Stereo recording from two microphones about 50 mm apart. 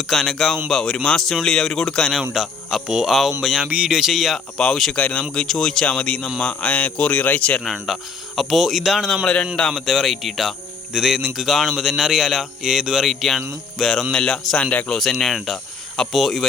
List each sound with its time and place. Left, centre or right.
0.1 s speech: centre
4.5 s speech: centre
4.9 s a man's voice: left
5.3 s speech: centre
5.8 s a man's voice: left
7.6 s speech: centre
9.2 s a man's voice: centre
9.6 s speech: centre
13.1 s speech: centre